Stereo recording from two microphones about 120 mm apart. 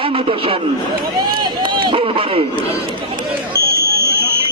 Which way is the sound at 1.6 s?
40° right (ahead or behind).